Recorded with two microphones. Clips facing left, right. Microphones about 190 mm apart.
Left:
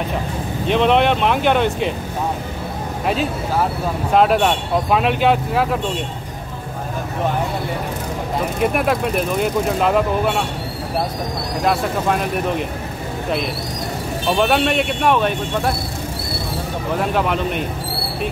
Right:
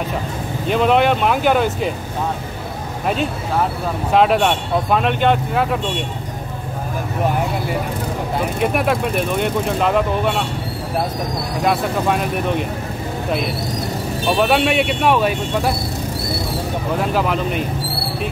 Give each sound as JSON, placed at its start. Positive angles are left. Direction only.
{"t": 0.7, "sound": "speech", "side_deg": 0}
{"t": 4.1, "sound": "speech", "side_deg": 0}
{"t": 8.5, "sound": "speech", "side_deg": 0}
{"t": 11.6, "sound": "speech", "side_deg": 0}
{"t": 14.3, "sound": "speech", "side_deg": -5}
{"t": 17.0, "sound": "speech", "side_deg": 0}